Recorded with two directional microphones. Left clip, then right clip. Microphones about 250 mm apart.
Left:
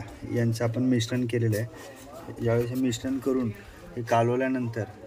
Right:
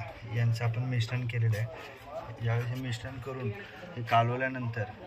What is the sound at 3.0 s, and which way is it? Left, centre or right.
A man's voice, left.